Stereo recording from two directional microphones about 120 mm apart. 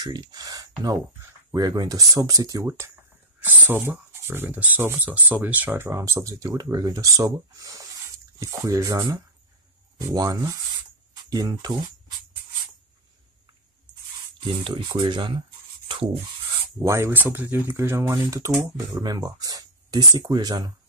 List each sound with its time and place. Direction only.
0.0 s speech: 35° right (ahead or behind)
3.3 s speech: 15° right (ahead or behind); by 11.9 s 35° right (ahead or behind)
14.4 s speech: 40° right (ahead or behind)
16.8 s speech: 20° right (ahead or behind)